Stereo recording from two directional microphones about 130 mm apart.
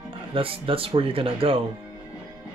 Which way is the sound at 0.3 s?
45° right (ahead or behind).